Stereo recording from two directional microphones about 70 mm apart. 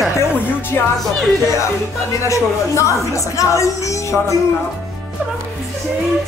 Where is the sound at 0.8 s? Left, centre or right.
Left.